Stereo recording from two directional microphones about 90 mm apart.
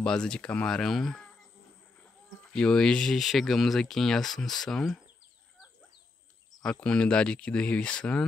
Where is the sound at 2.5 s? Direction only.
5° left (ahead or behind).